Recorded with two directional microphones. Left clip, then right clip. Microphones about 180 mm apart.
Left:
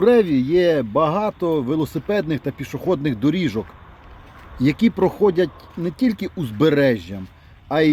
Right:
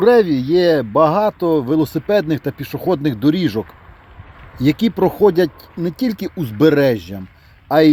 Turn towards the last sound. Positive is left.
turn(degrees=-15)  # may be behind; listen again after turning